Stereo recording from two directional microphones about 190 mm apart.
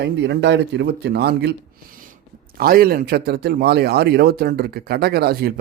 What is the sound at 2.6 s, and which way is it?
Speech, 50° right (ahead or behind).